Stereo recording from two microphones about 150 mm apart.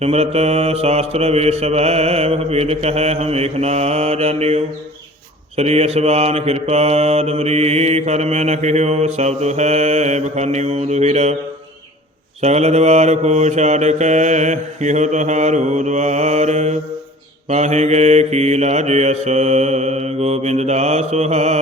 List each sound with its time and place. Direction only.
0.0 s mantra: 45° right (ahead or behind)
12.4 s mantra: 45° right (ahead or behind)